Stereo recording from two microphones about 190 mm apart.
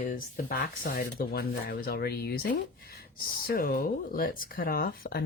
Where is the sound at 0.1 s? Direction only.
50° left (ahead or behind).